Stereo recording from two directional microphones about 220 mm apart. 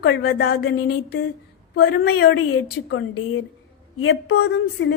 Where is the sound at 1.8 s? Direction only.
45° left (ahead or behind).